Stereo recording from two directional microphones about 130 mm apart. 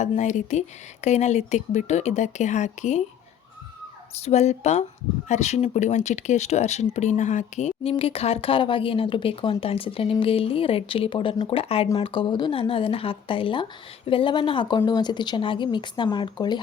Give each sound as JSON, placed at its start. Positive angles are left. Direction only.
{"t": 0.2, "sound": "speech", "side_deg": 65}
{"t": 4.2, "sound": "speech", "side_deg": 60}